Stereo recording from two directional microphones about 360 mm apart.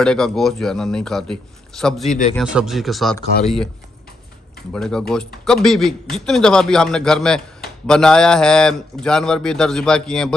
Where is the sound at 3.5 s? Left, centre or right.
Centre.